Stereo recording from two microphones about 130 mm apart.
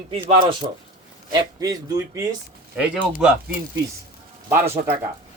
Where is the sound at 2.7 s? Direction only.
10° right (ahead or behind).